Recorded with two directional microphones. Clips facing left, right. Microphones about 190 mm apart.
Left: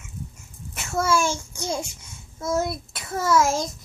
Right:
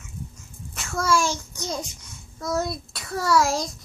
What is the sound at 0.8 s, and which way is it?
A child's voice, 25° left (ahead or behind).